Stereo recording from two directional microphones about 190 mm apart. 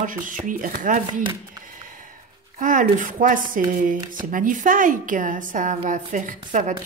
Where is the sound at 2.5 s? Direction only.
45° right (ahead or behind).